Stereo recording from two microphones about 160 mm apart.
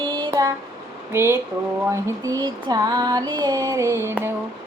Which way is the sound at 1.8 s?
20° right (ahead or behind).